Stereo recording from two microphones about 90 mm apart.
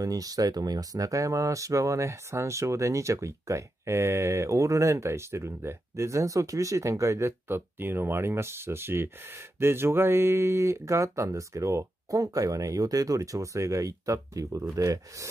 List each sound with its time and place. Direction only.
0.0 s speech: 40° right (ahead or behind)